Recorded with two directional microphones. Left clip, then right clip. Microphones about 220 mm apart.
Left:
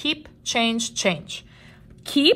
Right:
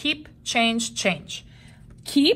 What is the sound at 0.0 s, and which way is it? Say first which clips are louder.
A woman's voice: even; 15° left (ahead or behind).